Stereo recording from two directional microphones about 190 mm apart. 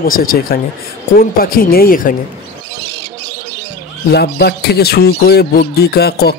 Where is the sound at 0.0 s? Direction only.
50° left (ahead or behind).